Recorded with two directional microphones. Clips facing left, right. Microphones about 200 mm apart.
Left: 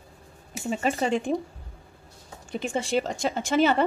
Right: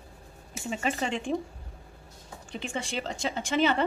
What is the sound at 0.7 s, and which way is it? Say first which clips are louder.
Speech: left 5 dB; 40° left (ahead or behind).